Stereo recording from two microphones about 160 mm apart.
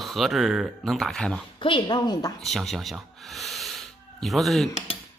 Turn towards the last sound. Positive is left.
turn(degrees=0)  # may be behind; listen again after turning